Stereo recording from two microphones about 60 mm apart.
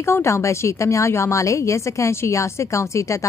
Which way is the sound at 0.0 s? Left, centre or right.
Left.